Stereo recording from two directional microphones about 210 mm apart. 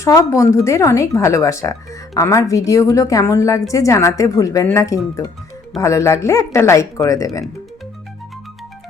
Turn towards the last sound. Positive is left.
turn(degrees=15)  # may be behind; listen again after turning